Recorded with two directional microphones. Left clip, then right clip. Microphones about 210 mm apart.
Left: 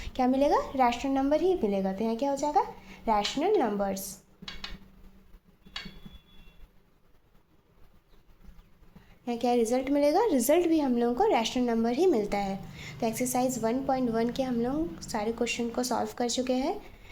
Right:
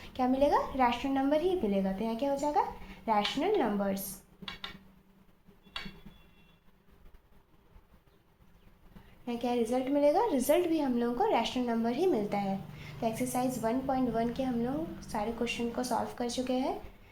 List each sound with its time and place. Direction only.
0.0 s a woman's voice: 55° left (ahead or behind)
9.2 s a woman's voice: 55° left (ahead or behind)